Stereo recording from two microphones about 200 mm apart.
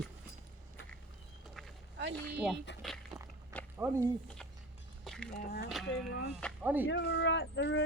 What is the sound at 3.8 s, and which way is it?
Speech, 15° right (ahead or behind).